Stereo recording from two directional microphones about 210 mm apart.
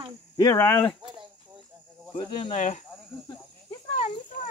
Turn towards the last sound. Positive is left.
turn(degrees=35)  # may be behind; listen again after turning